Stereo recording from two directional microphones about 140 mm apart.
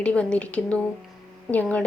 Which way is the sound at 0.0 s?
10° left (ahead or behind).